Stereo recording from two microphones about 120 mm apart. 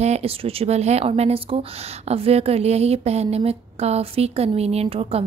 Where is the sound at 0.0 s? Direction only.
60° right (ahead or behind).